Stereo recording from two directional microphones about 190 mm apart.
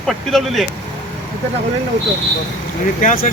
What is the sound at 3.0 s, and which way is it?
Speech, 45° left (ahead or behind).